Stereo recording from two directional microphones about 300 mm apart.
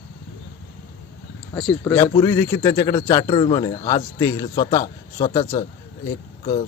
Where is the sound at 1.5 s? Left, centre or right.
Centre.